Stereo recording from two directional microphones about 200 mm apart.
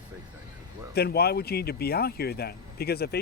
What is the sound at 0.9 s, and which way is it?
Speech, 55° left (ahead or behind).